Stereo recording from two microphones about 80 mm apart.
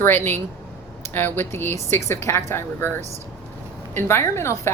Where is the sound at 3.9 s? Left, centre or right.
Left.